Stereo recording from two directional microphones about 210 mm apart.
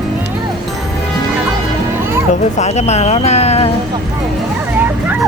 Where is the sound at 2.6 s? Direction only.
30° left (ahead or behind).